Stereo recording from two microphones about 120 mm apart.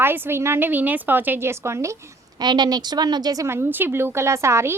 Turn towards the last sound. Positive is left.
turn(degrees=-20)  # may be behind; listen again after turning